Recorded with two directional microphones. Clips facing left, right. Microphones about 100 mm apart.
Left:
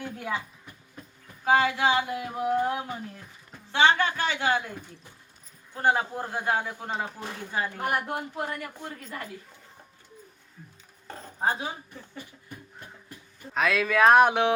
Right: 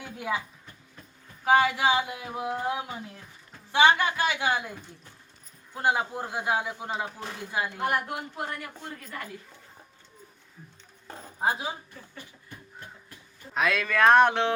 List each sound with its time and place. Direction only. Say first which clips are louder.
0.0 s a woman's voice: right 1 dB; 15° right (ahead or behind)
1.5 s a sound: right 1 dB; 15° right (ahead or behind)
7.9 s a woman's voice: even; 25° left (ahead or behind)
11.1 s dishes: even; 5° right (ahead or behind)
13.5 s speech: left 2 dB; centre (ahead or behind)